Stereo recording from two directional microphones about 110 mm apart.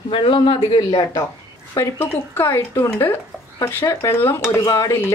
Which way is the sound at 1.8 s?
20° left (ahead or behind).